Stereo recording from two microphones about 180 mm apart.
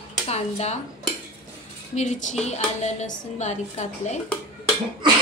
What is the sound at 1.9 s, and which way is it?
A woman's voice, 40° left (ahead or behind).